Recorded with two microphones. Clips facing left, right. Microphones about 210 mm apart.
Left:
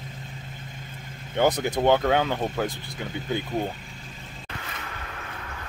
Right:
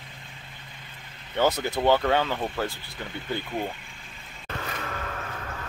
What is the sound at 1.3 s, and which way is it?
Speech, 15° left (ahead or behind).